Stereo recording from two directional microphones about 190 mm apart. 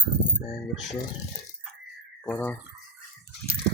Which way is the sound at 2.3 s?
10° left (ahead or behind).